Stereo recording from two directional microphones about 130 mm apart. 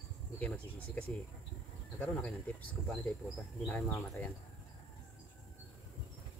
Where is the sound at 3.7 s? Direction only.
15° left (ahead or behind).